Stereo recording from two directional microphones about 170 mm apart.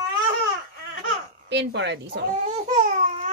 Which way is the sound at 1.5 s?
90° right.